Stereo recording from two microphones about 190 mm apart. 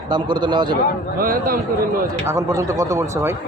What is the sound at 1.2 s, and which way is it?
Speech, 50° right (ahead or behind).